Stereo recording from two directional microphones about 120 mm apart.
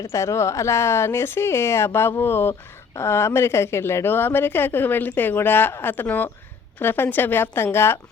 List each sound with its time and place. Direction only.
0.0 s a woman's voice: 25° left (ahead or behind)